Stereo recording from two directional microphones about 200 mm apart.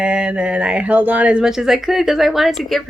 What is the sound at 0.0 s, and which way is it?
Speech, 5° right (ahead or behind).